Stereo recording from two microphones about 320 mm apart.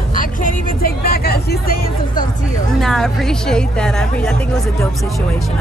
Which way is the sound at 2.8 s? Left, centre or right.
Centre.